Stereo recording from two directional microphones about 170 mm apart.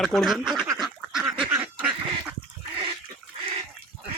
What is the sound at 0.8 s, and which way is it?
Duck, 5° right (ahead or behind).